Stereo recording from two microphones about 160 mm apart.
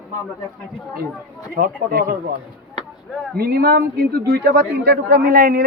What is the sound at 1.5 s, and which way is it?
Speech, 65° right (ahead or behind).